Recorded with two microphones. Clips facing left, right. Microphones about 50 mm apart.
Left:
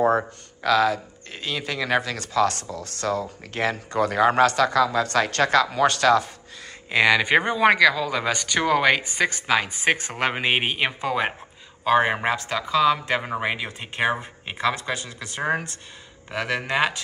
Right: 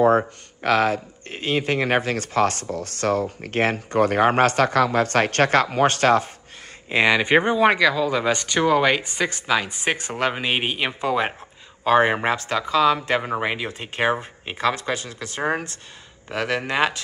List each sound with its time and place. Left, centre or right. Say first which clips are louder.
0.6 s speech: right 1 dB; right
6.9 s speech: right 1 dB; centre
14.6 s speech: right 2 dB; centre
16.3 s speech: right 2 dB; centre